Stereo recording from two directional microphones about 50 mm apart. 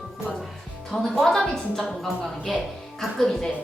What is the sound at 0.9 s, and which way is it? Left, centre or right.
A woman's voice, centre.